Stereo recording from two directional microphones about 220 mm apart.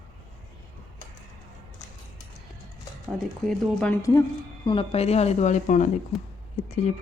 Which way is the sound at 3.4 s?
5° left (ahead or behind).